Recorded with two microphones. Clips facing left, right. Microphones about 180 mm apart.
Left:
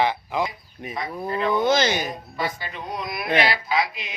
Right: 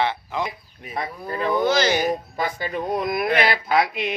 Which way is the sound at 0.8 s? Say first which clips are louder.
Left 1 dB; 20° left (ahead or behind).